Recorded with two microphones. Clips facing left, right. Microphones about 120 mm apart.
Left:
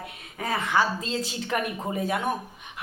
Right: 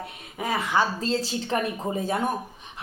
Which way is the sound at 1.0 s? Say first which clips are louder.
Right 4 dB; 35° right (ahead or behind).